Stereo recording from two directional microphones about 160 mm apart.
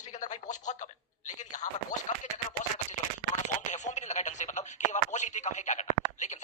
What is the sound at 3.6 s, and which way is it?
Radio, 45° left (ahead or behind).